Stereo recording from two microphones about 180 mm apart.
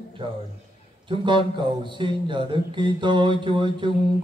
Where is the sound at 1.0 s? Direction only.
25° right (ahead or behind).